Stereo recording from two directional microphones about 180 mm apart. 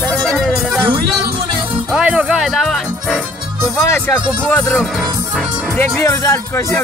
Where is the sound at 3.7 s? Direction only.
10° left (ahead or behind).